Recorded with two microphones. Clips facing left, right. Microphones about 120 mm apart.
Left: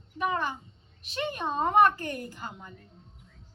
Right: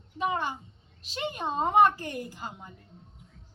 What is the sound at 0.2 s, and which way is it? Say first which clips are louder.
A child's voice: even; 30° right (ahead or behind).